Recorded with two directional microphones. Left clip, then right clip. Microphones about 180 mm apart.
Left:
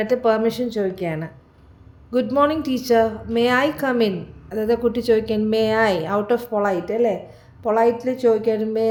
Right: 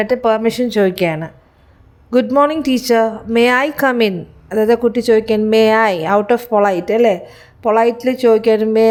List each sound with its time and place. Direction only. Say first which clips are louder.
0.0 s a woman's voice: right 4 dB; 40° right (ahead or behind)
2.0 s a woman's voice: right 6 dB; 40° right (ahead or behind)